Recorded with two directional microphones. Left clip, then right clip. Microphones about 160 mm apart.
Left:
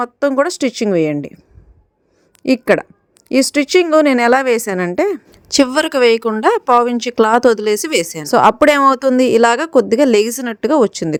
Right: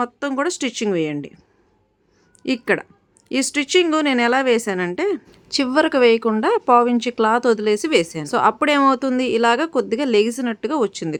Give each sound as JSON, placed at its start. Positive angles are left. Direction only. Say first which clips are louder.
{"t": 0.0, "sound": "speech", "louder": "left 7 dB", "side_deg": 35}
{"t": 2.4, "sound": "a woman's voice", "louder": "left 7 dB", "side_deg": 40}